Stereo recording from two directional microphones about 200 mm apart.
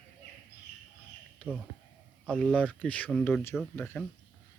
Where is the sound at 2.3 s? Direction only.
5° left (ahead or behind).